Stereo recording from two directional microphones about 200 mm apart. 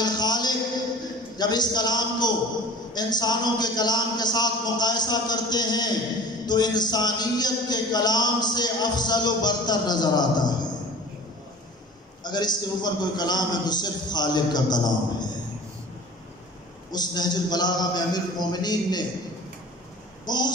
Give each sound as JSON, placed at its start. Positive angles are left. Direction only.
{"t": 0.0, "sound": "a sound", "side_deg": 20}
{"t": 1.4, "sound": "a man's voice", "side_deg": 20}
{"t": 12.2, "sound": "a man's voice", "side_deg": 20}
{"t": 16.9, "sound": "a man's voice", "side_deg": 20}
{"t": 20.2, "sound": "a man's voice", "side_deg": 20}